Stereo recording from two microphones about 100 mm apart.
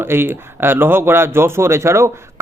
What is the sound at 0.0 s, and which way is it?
Speech, 25° right (ahead or behind).